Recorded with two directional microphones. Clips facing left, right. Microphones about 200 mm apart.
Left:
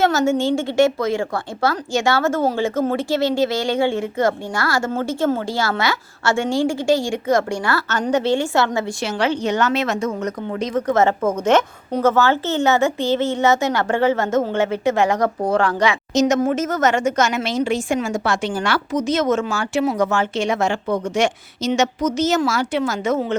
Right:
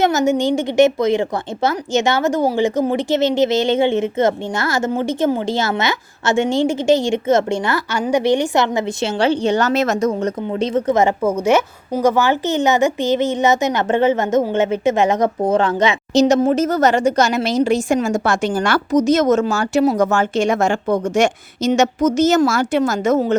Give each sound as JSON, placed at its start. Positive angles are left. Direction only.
{"t": 0.0, "sound": "a woman's voice", "side_deg": -20}
{"t": 7.9, "sound": "a woman's voice", "side_deg": -10}